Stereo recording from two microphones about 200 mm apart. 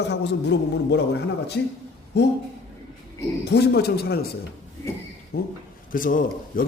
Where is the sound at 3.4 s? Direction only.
55° left (ahead or behind).